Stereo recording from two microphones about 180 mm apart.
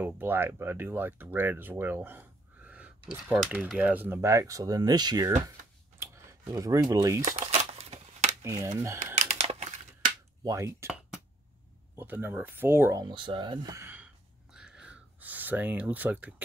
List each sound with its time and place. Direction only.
0.0 s speech: 10° right (ahead or behind)
5.9 s a sound: 20° right (ahead or behind)
7.2 s crumpling: 35° right (ahead or behind)
8.4 s speech: 15° right (ahead or behind)
9.0 s typing: 40° right (ahead or behind)
10.4 s speech: 15° right (ahead or behind)
11.9 s speech: 10° right (ahead or behind)
13.1 s a sound: 25° right (ahead or behind); by 16.4 s 10° right (ahead or behind)